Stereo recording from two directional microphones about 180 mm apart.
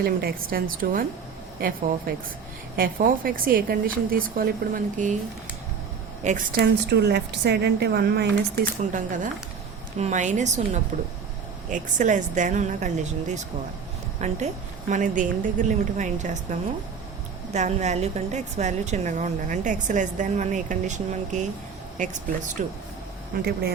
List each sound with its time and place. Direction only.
0.0 s a woman's voice: 55° right (ahead or behind)
2.7 s a woman's voice: 50° right (ahead or behind)
6.2 s a woman's voice: 45° right (ahead or behind)
6.8 s speech: 65° right (ahead or behind)
8.8 s a woman's voice: 45° right (ahead or behind)